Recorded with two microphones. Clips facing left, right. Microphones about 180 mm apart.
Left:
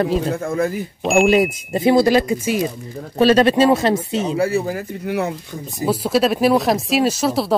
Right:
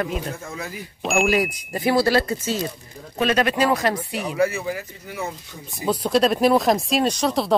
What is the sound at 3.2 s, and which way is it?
Speech, 30° left (ahead or behind).